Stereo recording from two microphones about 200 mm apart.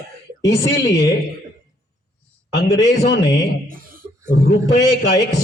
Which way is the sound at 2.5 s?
60° left (ahead or behind).